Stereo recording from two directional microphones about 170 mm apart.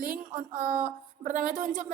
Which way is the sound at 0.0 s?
50° right (ahead or behind).